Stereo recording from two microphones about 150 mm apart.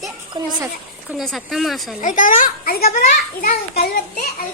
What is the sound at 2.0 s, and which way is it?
A child's voice, 60° left (ahead or behind).